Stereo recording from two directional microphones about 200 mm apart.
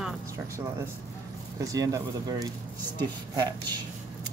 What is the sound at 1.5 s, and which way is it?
Speech, 15° right (ahead or behind).